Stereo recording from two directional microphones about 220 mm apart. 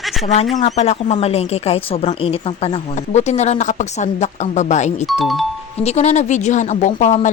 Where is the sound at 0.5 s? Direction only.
30° left (ahead or behind).